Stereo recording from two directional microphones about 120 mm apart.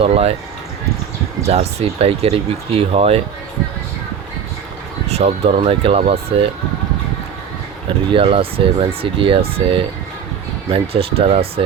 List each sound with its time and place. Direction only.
0.0 s speech: 60° right (ahead or behind)
1.5 s speech: 60° right (ahead or behind)
5.1 s speech: 60° right (ahead or behind)
8.1 s speech: 50° right (ahead or behind)